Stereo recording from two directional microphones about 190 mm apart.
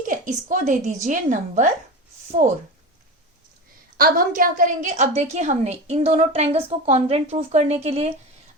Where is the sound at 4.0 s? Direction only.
50° right (ahead or behind).